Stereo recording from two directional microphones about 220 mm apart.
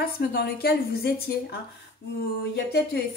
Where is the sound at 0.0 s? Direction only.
45° left (ahead or behind).